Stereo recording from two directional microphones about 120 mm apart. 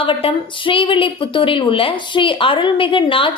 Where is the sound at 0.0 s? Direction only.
50° left (ahead or behind).